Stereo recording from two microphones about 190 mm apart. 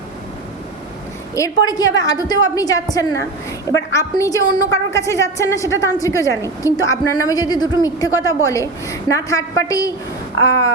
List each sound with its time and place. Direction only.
1.6 s a woman's voice: 20° left (ahead or behind)